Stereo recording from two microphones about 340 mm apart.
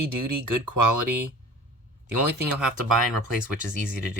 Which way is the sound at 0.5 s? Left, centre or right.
Right.